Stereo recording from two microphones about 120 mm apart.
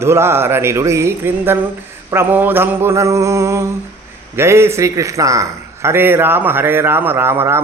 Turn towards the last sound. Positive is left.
turn(degrees=-20)  # may be behind; listen again after turning